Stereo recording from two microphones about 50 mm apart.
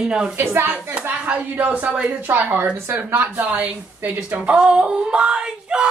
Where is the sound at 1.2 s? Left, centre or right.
Right.